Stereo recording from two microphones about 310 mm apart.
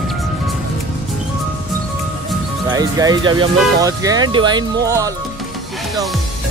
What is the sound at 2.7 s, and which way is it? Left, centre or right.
Speech, centre.